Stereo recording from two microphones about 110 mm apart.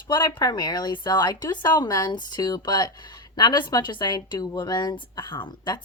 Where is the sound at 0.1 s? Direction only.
40° left (ahead or behind).